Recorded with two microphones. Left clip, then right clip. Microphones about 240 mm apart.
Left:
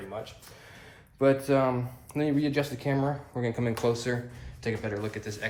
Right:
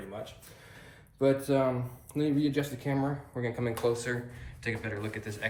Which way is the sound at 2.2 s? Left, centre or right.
Left.